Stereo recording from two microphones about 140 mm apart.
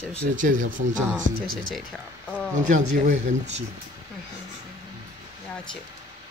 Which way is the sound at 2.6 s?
60° right (ahead or behind).